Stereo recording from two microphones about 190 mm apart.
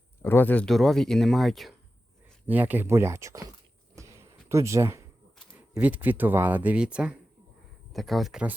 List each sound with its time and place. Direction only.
0.2 s speech: 10° left (ahead or behind); by 3.4 s 15° right (ahead or behind)
3.9 s a sound: 15° right (ahead or behind)
5.5 s speech: 10° right (ahead or behind)